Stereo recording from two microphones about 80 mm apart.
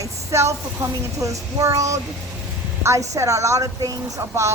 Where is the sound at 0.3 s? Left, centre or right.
Right.